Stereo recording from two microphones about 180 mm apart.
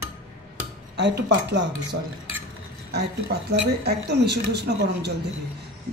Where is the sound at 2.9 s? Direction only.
65° right (ahead or behind).